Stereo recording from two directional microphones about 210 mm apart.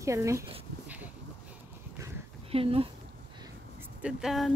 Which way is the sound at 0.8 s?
5° right (ahead or behind).